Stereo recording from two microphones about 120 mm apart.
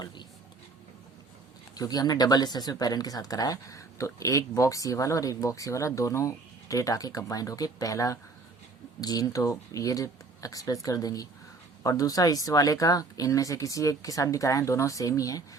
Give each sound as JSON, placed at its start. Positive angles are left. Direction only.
{"t": 1.7, "sound": "speech", "side_deg": 35}